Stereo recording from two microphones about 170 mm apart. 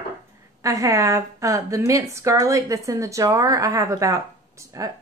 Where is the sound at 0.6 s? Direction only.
20° right (ahead or behind).